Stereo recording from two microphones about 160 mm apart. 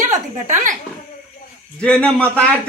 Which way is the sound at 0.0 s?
50° right (ahead or behind).